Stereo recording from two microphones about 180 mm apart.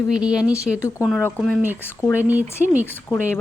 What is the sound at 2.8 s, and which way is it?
Speech, 10° left (ahead or behind).